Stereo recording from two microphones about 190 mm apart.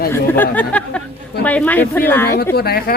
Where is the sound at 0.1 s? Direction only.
10° left (ahead or behind).